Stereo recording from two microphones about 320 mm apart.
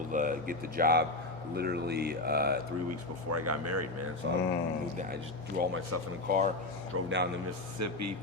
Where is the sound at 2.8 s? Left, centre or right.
Right.